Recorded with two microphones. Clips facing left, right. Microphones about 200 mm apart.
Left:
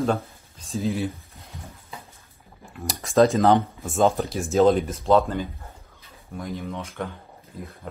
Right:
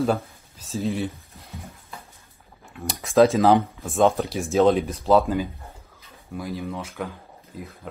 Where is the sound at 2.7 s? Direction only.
Centre (ahead or behind).